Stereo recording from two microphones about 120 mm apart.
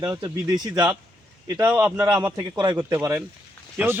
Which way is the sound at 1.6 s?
10° right (ahead or behind).